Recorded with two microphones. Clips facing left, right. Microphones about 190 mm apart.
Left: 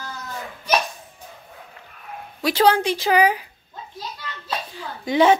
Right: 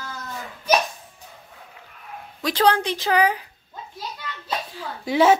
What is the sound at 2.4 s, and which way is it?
Speech, 10° left (ahead or behind).